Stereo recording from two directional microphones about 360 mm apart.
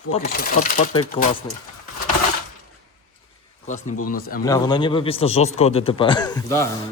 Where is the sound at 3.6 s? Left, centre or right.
Centre.